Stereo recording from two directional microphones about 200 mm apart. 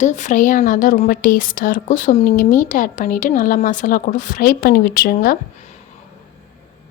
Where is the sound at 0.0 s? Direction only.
35° left (ahead or behind).